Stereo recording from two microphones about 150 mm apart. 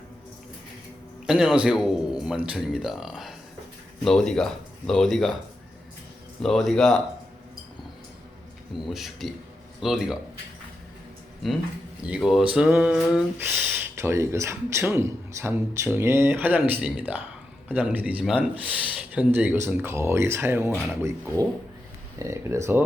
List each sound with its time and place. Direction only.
1.3 s a man's voice: 5° right (ahead or behind)
6.4 s a man's voice: centre (ahead or behind)
8.7 s a man's voice: centre (ahead or behind)
11.4 s a man's voice: centre (ahead or behind); by 20.7 s 15° right (ahead or behind)
22.2 s speech: 20° right (ahead or behind)